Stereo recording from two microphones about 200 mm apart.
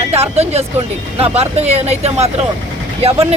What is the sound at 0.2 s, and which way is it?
Speech, 30° right (ahead or behind).